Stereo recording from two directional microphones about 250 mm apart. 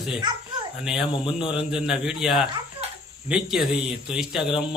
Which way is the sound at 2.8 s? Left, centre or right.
Right.